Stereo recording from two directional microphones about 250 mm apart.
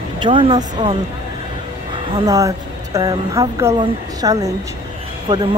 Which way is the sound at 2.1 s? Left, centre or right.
Centre.